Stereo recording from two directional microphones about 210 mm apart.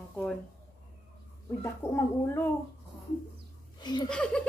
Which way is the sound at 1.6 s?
10° left (ahead or behind).